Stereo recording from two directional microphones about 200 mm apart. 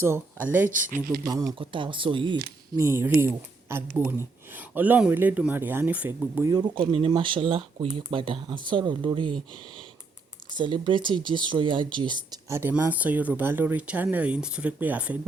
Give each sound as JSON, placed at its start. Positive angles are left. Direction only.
{"t": 0.5, "sound": "speech", "side_deg": -10}
{"t": 0.9, "sound": "speech", "side_deg": -45}
{"t": 1.2, "sound": "speech", "side_deg": -15}
{"t": 2.7, "sound": "speech", "side_deg": -15}
{"t": 10.5, "sound": "speech", "side_deg": -25}